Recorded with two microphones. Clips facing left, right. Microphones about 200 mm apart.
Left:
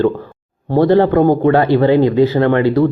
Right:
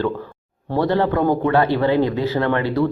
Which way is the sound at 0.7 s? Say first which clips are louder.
Left 8 dB; 40° left (ahead or behind).